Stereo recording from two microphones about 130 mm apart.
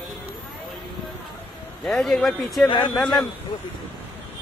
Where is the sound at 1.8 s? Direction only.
5° left (ahead or behind).